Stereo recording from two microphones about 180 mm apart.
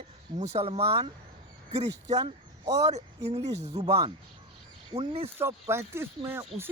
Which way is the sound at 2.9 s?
40° right (ahead or behind).